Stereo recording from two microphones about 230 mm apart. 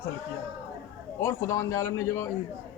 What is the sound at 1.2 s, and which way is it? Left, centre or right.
Speech, centre.